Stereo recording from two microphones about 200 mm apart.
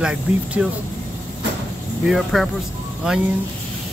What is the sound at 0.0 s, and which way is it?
Speech, 5° right (ahead or behind).